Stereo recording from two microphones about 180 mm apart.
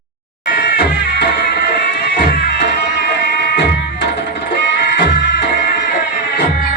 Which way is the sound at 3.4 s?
65° left (ahead or behind).